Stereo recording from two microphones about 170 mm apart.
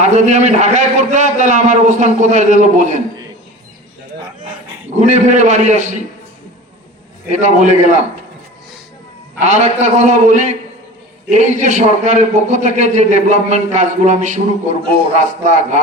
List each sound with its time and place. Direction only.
0.0 s a man's voice: 45° right (ahead or behind)
4.9 s a man's voice: 45° right (ahead or behind)
7.3 s a man's voice: 45° right (ahead or behind)
9.4 s a man's voice: 45° right (ahead or behind)